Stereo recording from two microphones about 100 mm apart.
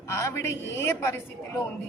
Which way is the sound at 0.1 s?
30° left (ahead or behind).